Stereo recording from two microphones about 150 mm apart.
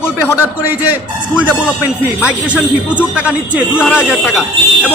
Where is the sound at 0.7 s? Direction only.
10° right (ahead or behind).